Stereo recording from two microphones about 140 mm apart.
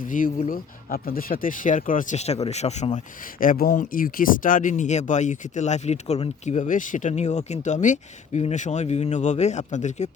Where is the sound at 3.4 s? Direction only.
85° left.